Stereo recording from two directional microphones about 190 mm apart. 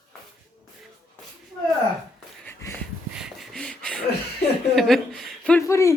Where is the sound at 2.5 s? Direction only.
15° left (ahead or behind).